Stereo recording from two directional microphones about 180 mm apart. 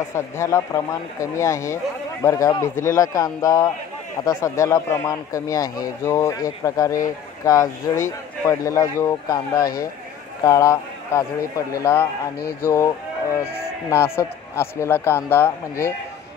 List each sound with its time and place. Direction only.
0.1 s a man's voice: 15° left (ahead or behind)